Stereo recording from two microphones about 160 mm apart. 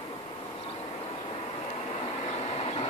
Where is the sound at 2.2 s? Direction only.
40° left (ahead or behind).